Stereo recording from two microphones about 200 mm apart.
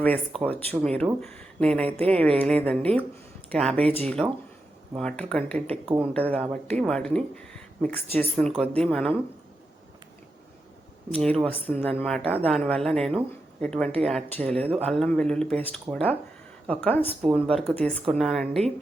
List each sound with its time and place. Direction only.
0.0 s speech: 5° left (ahead or behind)
3.8 s speech: 30° right (ahead or behind)
4.0 s speech: 5° left (ahead or behind)
11.1 s speech: 5° left (ahead or behind)
14.6 s speech: 30° right (ahead or behind)
14.9 s speech: 5° left (ahead or behind)